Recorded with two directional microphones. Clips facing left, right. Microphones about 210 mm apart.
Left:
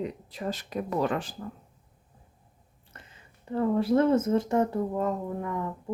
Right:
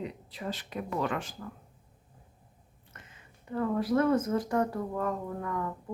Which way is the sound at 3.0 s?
30° left (ahead or behind).